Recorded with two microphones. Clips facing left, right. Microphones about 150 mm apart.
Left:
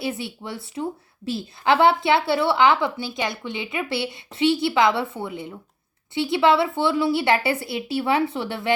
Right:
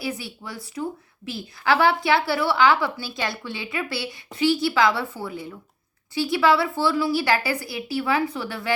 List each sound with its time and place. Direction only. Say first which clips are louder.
0.0 s a woman's voice: left 2 dB; 25° left (ahead or behind)